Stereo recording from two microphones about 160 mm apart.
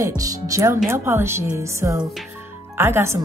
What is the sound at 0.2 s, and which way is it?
Speech, 20° right (ahead or behind).